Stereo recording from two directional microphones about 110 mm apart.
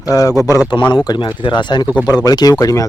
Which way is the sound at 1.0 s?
45° left (ahead or behind).